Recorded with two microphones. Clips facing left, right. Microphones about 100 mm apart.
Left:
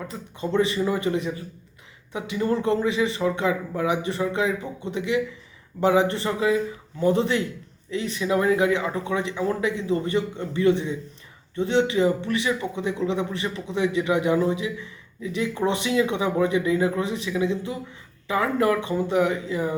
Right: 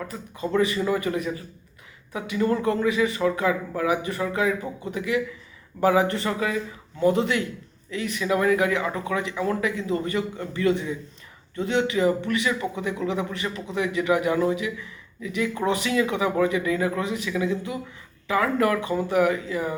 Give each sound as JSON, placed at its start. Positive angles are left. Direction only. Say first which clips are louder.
{"t": 0.5, "sound": "speech", "louder": "even", "side_deg": 25}